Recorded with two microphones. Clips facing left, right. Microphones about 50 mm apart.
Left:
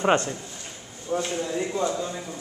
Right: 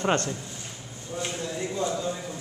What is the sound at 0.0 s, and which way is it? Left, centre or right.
Speech, centre.